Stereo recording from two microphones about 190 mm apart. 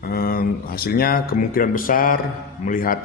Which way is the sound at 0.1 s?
50° left (ahead or behind).